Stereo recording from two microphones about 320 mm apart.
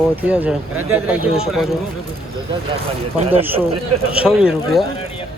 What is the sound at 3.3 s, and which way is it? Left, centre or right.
Speech, centre.